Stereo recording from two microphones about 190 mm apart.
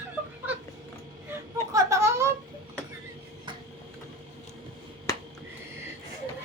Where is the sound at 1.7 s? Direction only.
15° right (ahead or behind).